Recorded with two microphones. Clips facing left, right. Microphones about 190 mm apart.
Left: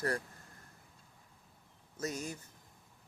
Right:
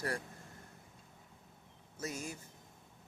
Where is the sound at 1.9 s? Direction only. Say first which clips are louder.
Left 3 dB; 10° right (ahead or behind).